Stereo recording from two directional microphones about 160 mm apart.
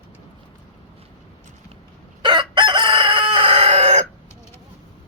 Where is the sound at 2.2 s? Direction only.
30° right (ahead or behind).